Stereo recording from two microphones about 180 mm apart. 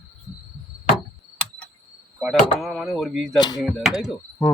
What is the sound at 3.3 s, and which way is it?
Speech, 20° left (ahead or behind).